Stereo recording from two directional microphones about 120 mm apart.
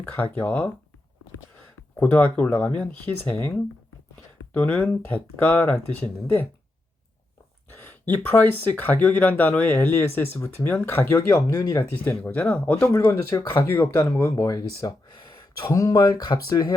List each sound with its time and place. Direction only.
0.3 s speech: 10° left (ahead or behind)
2.0 s speech: 10° left (ahead or behind)
4.5 s speech: 10° left (ahead or behind)
7.8 s speech: 15° left (ahead or behind)
14.8 s a sound: 35° left (ahead or behind)
15.7 s speech: 30° left (ahead or behind)